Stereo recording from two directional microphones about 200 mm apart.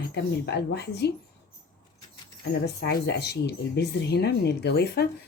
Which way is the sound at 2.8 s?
55° left (ahead or behind).